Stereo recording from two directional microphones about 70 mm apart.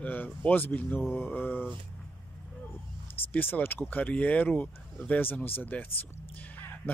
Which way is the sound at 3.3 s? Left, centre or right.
Left.